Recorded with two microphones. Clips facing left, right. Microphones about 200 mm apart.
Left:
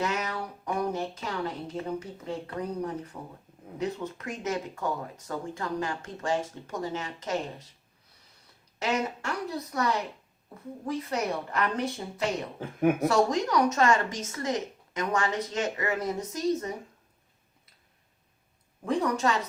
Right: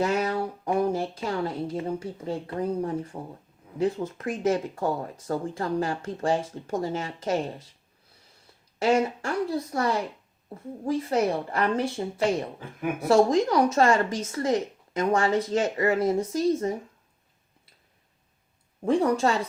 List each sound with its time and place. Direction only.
0.0 s a sound: 30° right (ahead or behind)
1.9 s speech: 30° right (ahead or behind)
8.8 s speech: 30° right (ahead or behind)
18.9 s speech: 30° right (ahead or behind)